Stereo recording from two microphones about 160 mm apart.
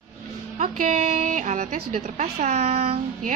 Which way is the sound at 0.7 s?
55° right (ahead or behind).